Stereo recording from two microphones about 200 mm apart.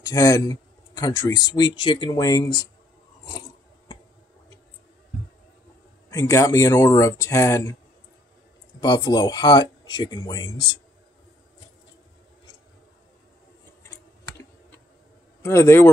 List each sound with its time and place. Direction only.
0.0 s speech: 15° left (ahead or behind)
6.0 s speech: 15° left (ahead or behind)
8.8 s speech: 20° left (ahead or behind)
15.4 s speech: 10° left (ahead or behind)